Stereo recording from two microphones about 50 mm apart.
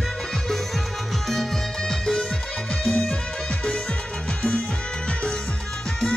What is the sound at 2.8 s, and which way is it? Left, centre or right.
Music, centre.